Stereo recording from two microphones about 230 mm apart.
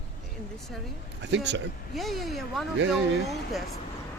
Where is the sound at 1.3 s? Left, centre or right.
Right.